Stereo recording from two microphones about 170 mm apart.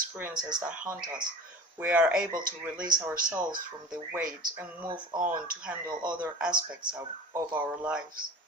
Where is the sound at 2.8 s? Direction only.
25° right (ahead or behind).